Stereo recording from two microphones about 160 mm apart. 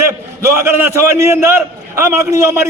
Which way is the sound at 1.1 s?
15° right (ahead or behind).